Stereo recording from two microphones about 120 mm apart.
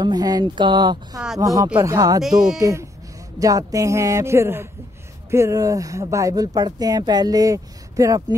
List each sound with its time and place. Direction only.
0.0 s speech: 35° right (ahead or behind)
2.2 s speech: 5° right (ahead or behind)
2.5 s speech: 25° right (ahead or behind)